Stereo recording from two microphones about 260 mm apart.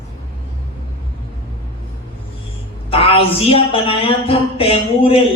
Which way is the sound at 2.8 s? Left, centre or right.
Left.